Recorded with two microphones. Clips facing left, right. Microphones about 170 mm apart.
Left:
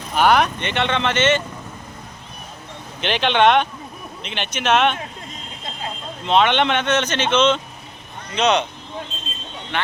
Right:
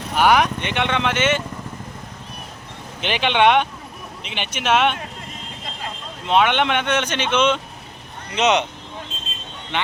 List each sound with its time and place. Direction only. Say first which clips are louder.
0.2 s speech: even; 10° right (ahead or behind)
3.0 s speech: left 1 dB; 10° right (ahead or behind)
6.2 s speech: left 1 dB; 10° right (ahead or behind)
9.7 s speech: even; 20° right (ahead or behind)